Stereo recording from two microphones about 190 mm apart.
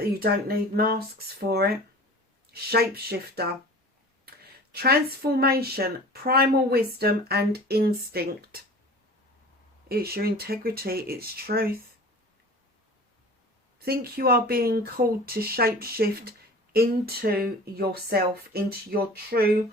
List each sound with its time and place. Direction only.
0.2 s speech: 55° right (ahead or behind)
4.7 s speech: 55° right (ahead or behind)
9.9 s speech: 55° right (ahead or behind)
13.7 s speech: 55° right (ahead or behind)